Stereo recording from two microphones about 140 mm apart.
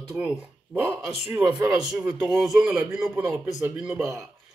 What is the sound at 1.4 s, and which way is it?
Throat clearing, 30° right (ahead or behind).